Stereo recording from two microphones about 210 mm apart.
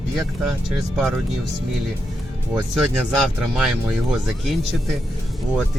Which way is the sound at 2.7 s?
Centre (ahead or behind).